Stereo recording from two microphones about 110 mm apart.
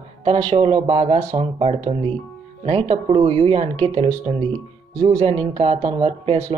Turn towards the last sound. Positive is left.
turn(degrees=-70)  # may be behind; listen again after turning